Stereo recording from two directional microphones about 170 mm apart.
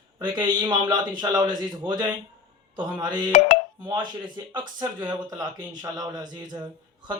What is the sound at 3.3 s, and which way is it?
Speech, 40° left (ahead or behind).